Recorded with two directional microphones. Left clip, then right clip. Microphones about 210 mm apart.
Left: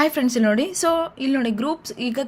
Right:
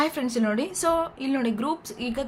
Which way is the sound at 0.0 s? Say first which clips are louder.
Left 6 dB; 30° left (ahead or behind).